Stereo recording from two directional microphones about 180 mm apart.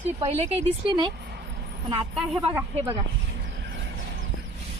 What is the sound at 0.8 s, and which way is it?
Speech, 25° right (ahead or behind).